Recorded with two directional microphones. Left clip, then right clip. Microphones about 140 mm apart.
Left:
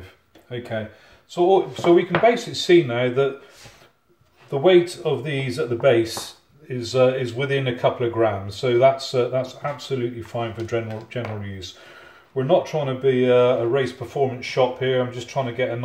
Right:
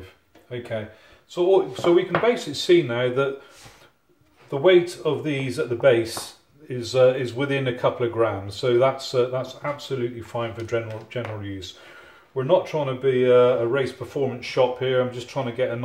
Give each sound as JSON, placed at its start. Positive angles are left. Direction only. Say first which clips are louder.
{"t": 1.3, "sound": "speech", "louder": "left 2 dB", "side_deg": -20}
{"t": 4.5, "sound": "speech", "louder": "left 1 dB", "side_deg": -10}